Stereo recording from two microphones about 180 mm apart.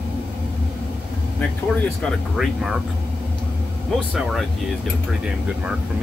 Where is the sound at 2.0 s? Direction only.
Centre (ahead or behind).